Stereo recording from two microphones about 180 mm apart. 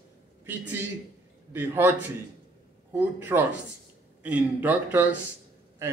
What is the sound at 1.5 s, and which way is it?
A man's voice, 10° right (ahead or behind).